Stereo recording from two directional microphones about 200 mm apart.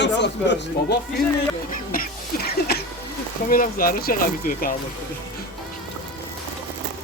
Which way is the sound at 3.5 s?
45° left (ahead or behind).